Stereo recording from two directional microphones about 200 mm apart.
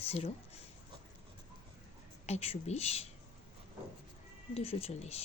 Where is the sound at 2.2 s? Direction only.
30° left (ahead or behind).